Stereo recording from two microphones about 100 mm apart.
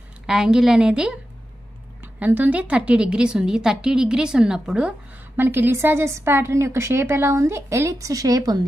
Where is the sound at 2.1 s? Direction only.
15° right (ahead or behind).